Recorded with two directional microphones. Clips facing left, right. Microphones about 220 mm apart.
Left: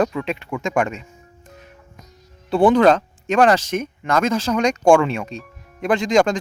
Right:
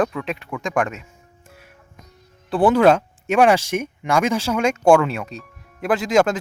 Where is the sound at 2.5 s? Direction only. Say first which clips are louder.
Left 1 dB; 5° right (ahead or behind).